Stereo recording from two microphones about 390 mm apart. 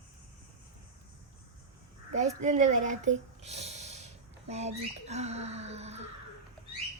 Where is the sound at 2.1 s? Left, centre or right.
Centre.